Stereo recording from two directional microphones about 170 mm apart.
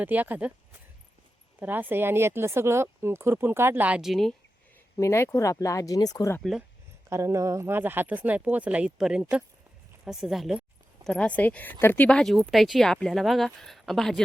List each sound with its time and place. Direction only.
0.0 s speech: 10° right (ahead or behind)
1.5 s speech: 10° right (ahead or behind)
4.9 s speech: 15° left (ahead or behind)
6.4 s speech: centre (ahead or behind)
7.1 s speech: 15° right (ahead or behind); by 14.2 s centre (ahead or behind)